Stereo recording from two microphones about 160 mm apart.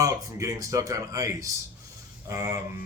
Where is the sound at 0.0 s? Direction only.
20° right (ahead or behind).